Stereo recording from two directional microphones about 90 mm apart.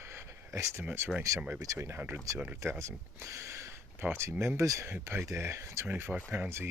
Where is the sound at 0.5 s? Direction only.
35° right (ahead or behind).